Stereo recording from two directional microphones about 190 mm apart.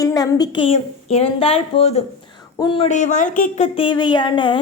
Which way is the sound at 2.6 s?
25° left (ahead or behind).